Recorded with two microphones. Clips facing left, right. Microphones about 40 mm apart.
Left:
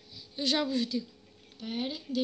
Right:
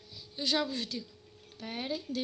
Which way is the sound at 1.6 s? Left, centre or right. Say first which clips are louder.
Left 4 dB; centre.